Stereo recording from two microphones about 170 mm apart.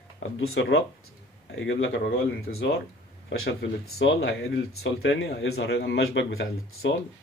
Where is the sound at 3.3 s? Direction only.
90° left.